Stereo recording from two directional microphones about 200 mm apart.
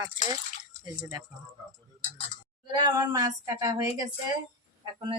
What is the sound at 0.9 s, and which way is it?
Speech, 10° right (ahead or behind).